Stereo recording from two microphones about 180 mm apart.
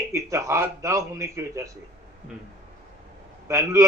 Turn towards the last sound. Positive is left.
turn(degrees=-15)  # may be behind; listen again after turning